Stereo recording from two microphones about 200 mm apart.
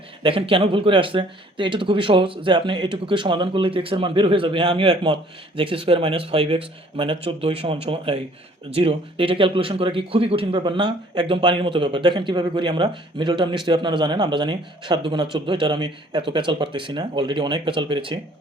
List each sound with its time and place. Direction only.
0.2 s speech: 25° right (ahead or behind)